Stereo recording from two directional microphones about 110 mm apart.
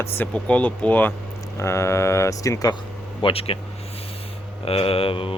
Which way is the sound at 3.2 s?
60° left (ahead or behind).